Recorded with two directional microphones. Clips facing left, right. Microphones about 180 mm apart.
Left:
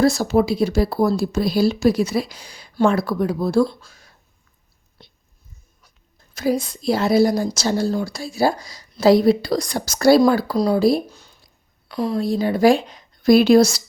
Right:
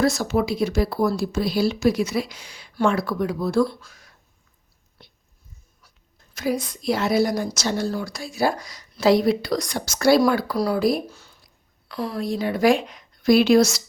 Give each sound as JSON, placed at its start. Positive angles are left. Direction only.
{"t": 0.0, "sound": "speech", "side_deg": 30}
{"t": 6.3, "sound": "speech", "side_deg": 30}
{"t": 11.1, "sound": "a sound", "side_deg": 15}
{"t": 11.9, "sound": "a woman's voice", "side_deg": 15}
{"t": 12.2, "sound": "speech", "side_deg": 35}